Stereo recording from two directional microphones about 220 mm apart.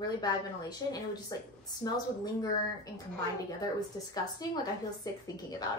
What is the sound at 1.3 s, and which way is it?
Speech, 15° left (ahead or behind).